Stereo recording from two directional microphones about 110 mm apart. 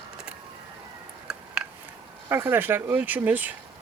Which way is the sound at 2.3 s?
20° right (ahead or behind).